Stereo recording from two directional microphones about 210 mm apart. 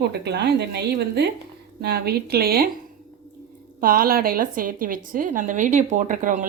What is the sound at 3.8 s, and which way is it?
A woman's voice, 45° right (ahead or behind).